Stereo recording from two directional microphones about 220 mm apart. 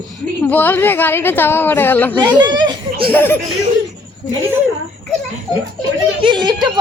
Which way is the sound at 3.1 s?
10° left (ahead or behind).